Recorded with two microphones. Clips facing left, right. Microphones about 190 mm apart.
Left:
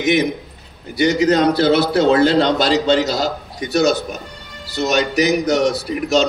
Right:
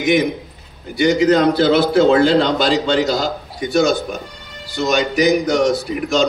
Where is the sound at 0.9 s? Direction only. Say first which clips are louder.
Right 1 dB; 40° left (ahead or behind).